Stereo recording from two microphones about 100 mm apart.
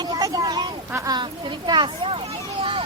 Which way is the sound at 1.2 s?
50° right (ahead or behind).